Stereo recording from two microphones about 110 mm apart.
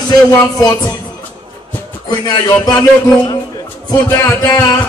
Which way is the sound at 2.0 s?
40° left (ahead or behind).